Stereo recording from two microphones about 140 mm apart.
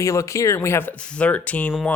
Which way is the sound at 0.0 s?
20° left (ahead or behind).